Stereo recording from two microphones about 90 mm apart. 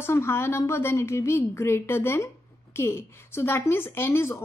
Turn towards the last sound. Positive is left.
turn(degrees=25)  # may be behind; listen again after turning